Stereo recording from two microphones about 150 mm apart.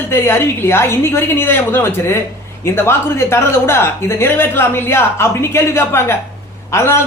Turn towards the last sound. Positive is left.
turn(degrees=20)  # may be behind; listen again after turning